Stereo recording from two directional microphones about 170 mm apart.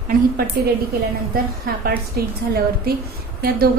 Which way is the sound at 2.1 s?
65° right (ahead or behind).